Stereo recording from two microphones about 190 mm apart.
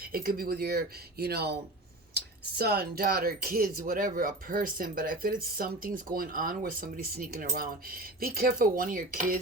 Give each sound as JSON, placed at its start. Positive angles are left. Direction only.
{"t": 0.0, "sound": "speech", "side_deg": -50}